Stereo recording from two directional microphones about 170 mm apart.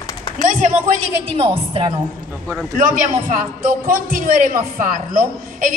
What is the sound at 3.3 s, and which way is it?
A woman's voice, 55° right (ahead or behind).